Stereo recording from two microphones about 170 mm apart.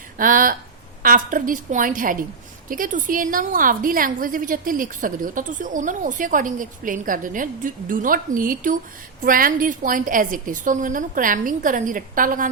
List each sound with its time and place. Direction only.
0.2 s a woman's voice: 55° right (ahead or behind)